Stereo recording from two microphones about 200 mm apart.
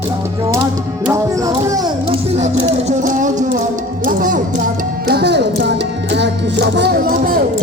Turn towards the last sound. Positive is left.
turn(degrees=-45)  # may be behind; listen again after turning